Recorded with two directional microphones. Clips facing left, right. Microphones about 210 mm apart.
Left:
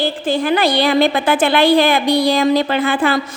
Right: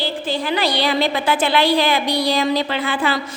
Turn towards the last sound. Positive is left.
turn(degrees=50)  # may be behind; listen again after turning